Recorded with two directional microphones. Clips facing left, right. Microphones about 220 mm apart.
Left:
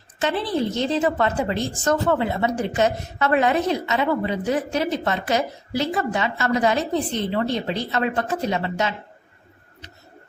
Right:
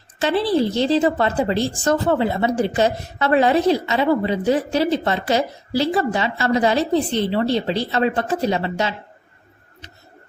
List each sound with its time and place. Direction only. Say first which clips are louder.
0.2 s a woman's voice: right 5 dB; 35° right (ahead or behind)